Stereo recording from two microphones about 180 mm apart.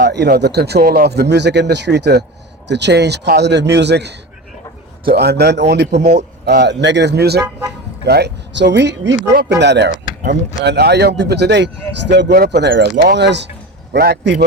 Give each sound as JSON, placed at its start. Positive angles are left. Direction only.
{"t": 0.0, "sound": "speech", "side_deg": -65}
{"t": 9.3, "sound": "speech", "side_deg": -65}